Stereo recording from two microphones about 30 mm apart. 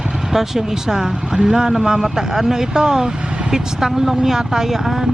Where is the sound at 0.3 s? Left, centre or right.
Centre.